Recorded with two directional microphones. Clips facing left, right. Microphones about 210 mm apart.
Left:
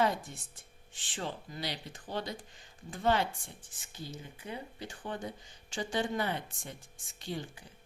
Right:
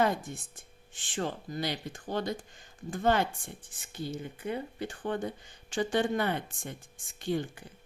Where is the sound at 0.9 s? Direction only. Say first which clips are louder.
Right 5 dB; 50° right (ahead or behind).